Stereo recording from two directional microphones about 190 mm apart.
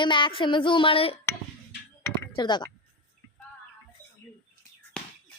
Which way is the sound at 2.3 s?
25° left (ahead or behind).